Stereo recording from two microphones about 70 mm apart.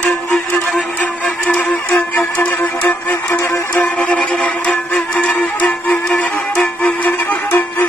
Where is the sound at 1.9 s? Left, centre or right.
Left.